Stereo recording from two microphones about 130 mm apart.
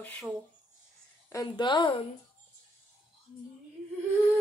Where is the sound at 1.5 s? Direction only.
35° left (ahead or behind).